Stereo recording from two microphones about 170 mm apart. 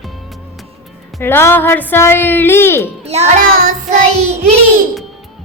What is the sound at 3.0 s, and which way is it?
Speech, 40° right (ahead or behind).